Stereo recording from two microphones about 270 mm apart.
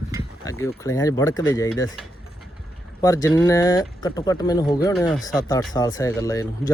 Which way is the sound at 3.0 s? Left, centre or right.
Centre.